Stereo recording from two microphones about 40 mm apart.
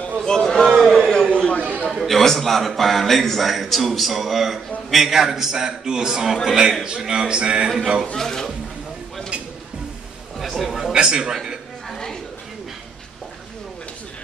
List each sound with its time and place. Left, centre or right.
0.2 s a man's voice: centre
0.8 s a sound: centre
1.3 s chatter: left
1.6 s chatter: right
1.9 s a man's voice: centre; by 7.7 s right
8.2 s speech: centre
10.4 s chatter: centre
11.0 s a man's voice: right
11.9 s a sound: centre